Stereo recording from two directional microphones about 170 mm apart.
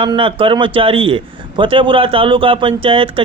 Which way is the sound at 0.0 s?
30° right (ahead or behind).